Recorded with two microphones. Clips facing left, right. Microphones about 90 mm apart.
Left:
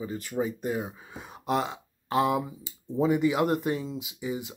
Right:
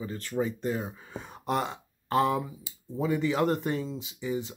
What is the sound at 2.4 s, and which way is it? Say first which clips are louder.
Speech: left 4 dB; 25° left (ahead or behind).